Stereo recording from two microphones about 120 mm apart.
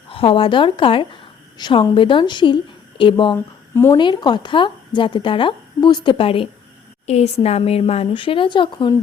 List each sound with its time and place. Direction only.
0.1 s a woman's voice: 50° left (ahead or behind)
3.3 s speech: 20° left (ahead or behind)
3.9 s speech: 40° left (ahead or behind)
7.1 s a woman's voice: 60° left (ahead or behind); by 8.9 s 40° left (ahead or behind)